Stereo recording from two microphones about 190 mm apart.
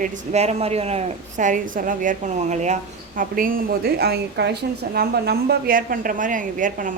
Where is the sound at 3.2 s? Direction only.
50° right (ahead or behind).